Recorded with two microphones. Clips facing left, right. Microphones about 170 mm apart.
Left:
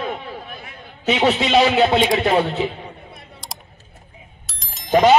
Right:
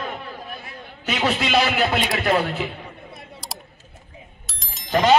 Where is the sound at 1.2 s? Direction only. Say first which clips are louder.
Left 4 dB; 25° left (ahead or behind).